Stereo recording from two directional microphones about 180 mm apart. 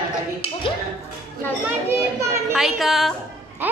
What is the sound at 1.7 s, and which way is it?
Speech, 10° right (ahead or behind).